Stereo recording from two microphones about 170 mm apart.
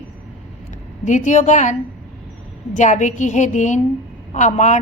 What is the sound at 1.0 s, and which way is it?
A woman's voice, 45° left (ahead or behind).